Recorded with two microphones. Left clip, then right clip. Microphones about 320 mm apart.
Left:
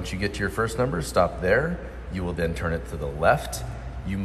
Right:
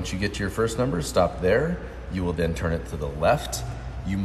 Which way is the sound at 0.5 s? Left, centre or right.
Centre.